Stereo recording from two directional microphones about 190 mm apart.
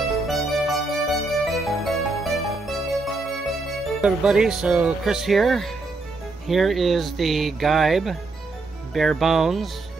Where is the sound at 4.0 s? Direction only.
Centre (ahead or behind).